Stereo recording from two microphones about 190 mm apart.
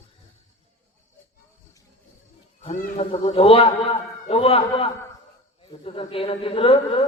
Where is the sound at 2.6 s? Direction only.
30° left (ahead or behind).